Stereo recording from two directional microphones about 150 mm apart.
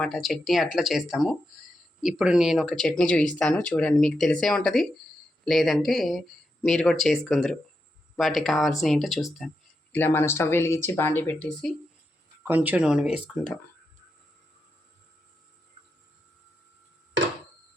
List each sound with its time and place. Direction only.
0.0 s speech: centre (ahead or behind)
9.9 s speech: 15° left (ahead or behind)
12.4 s speech: 15° right (ahead or behind)
13.2 s speech: 5° left (ahead or behind)